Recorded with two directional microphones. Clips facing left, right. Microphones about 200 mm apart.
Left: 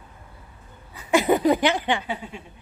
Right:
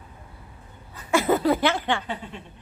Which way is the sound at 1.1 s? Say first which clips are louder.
Left 2 dB; 15° left (ahead or behind).